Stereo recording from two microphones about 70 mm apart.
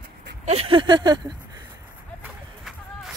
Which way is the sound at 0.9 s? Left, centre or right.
Right.